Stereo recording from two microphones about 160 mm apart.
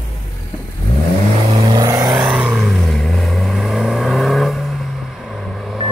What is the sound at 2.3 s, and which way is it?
Vehicle, centre (ahead or behind).